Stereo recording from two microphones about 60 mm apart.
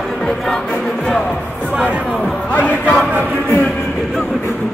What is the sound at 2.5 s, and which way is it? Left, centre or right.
Music, left.